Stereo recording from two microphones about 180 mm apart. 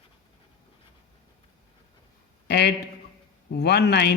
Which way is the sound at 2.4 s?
65° left (ahead or behind).